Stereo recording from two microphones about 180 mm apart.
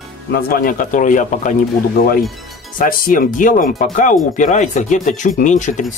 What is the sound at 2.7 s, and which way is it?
Speech, 50° left (ahead or behind).